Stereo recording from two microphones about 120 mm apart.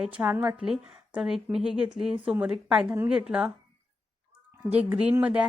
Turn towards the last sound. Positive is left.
turn(degrees=-10)  # may be behind; listen again after turning